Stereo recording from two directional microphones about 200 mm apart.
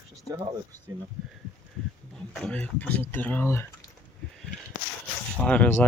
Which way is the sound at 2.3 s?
5° left (ahead or behind).